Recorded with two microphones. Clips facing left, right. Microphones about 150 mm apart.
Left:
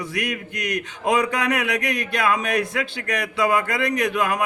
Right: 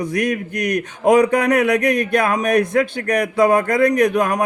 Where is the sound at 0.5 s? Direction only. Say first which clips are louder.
Right 4 dB; 20° left (ahead or behind).